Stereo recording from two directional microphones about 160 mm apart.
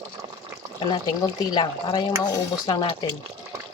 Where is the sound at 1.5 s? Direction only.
25° left (ahead or behind).